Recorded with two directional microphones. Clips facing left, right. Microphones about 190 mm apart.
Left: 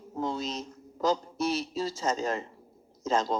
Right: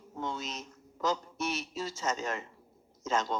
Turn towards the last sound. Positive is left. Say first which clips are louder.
# left 4 dB
turn(degrees=35)  # may be behind; listen again after turning